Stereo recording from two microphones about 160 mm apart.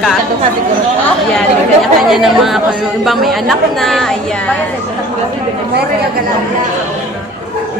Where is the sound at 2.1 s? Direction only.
Centre (ahead or behind).